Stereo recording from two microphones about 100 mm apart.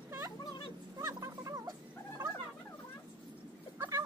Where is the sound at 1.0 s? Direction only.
30° right (ahead or behind).